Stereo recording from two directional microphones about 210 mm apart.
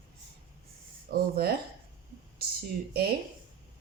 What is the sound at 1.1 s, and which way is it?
Speech, 45° right (ahead or behind).